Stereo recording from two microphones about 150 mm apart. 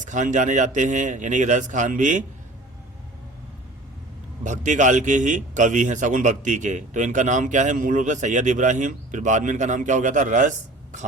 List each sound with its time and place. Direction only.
0.0 s a man's voice: 55° right (ahead or behind)
4.4 s a man's voice: 55° right (ahead or behind)